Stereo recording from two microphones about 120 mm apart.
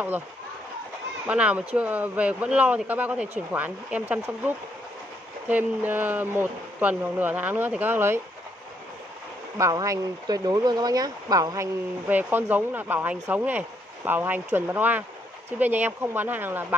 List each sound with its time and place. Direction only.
1.2 s speech: 10° right (ahead or behind)
9.6 s speech: 30° right (ahead or behind)
12.1 s speech: 15° right (ahead or behind)